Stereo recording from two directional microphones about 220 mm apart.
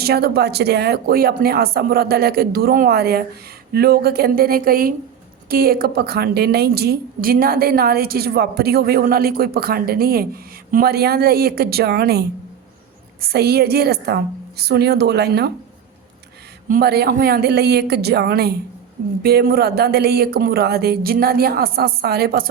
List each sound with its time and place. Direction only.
0.0 s a woman's voice: 45° right (ahead or behind)
13.2 s a woman's voice: 45° right (ahead or behind)
16.6 s a woman's voice: 40° right (ahead or behind)